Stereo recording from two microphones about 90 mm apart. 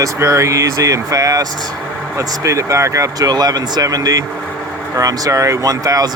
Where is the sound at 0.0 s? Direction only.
35° right (ahead or behind).